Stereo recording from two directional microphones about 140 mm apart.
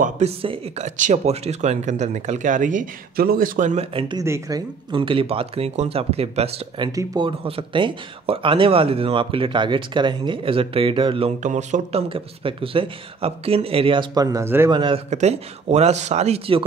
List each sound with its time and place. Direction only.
0.4 s speech: 45° right (ahead or behind); by 3.8 s 65° right (ahead or behind)
4.2 s speech: 25° right (ahead or behind); by 6.5 s 45° right (ahead or behind)
6.8 s speech: 35° right (ahead or behind)
11.4 s speech: 60° right (ahead or behind)
12.1 s speech: 40° right (ahead or behind)
14.1 s speech: 25° right (ahead or behind)
14.7 s speech: 35° right (ahead or behind)
15.0 s speech: 55° right (ahead or behind)